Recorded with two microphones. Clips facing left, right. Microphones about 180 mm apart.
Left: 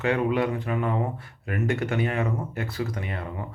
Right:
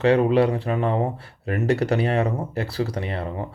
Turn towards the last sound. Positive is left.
turn(degrees=-30)  # may be behind; listen again after turning